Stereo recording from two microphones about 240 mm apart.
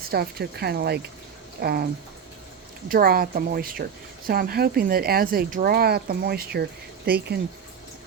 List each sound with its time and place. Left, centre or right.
0.1 s speech: right
2.9 s speech: right